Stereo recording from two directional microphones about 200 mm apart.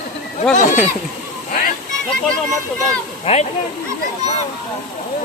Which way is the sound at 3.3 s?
30° left (ahead or behind).